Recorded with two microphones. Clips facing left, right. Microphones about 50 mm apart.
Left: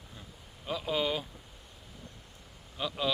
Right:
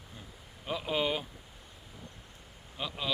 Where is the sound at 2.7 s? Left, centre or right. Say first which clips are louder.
Left 4 dB; centre.